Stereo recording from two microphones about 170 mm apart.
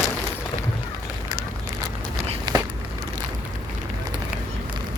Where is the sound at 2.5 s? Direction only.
25° right (ahead or behind).